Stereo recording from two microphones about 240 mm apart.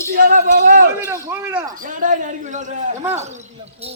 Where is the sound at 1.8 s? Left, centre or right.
Right.